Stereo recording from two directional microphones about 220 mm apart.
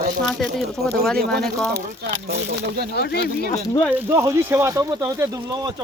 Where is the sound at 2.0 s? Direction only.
50° right (ahead or behind).